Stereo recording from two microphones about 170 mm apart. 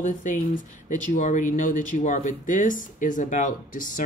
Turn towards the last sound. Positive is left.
turn(degrees=50)  # may be behind; listen again after turning